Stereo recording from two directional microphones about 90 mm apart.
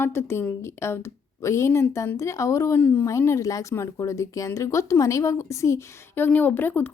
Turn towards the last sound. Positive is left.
turn(degrees=20)  # may be behind; listen again after turning